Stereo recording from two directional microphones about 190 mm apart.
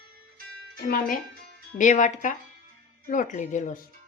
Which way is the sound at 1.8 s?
40° left (ahead or behind).